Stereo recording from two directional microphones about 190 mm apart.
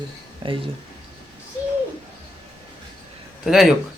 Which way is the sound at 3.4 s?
Centre (ahead or behind).